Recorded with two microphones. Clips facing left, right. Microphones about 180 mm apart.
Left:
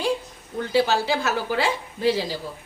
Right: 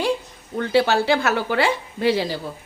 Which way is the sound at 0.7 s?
65° right (ahead or behind).